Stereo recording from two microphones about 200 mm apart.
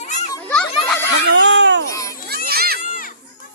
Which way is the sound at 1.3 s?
65° right (ahead or behind).